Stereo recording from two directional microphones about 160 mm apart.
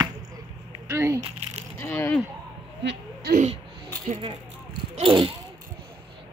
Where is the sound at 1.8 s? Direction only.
15° left (ahead or behind).